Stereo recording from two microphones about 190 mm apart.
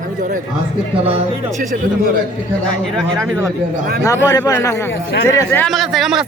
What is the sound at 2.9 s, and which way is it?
Speech, centre (ahead or behind).